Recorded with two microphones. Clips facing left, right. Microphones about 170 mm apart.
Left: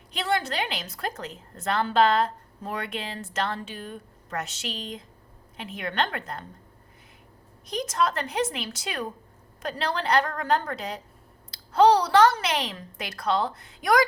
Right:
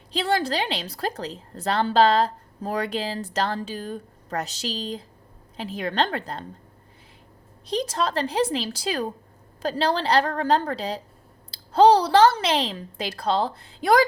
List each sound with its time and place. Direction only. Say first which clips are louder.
0.1 s a woman's voice: right 4 dB; 35° right (ahead or behind)
7.7 s a woman's voice: right 1 dB; 30° right (ahead or behind)